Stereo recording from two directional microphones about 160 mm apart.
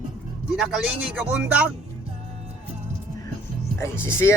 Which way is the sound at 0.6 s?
5° right (ahead or behind).